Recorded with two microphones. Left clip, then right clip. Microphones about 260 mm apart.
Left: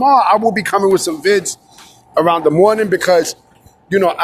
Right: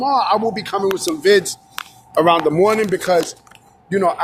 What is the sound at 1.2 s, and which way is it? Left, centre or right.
Speech, centre.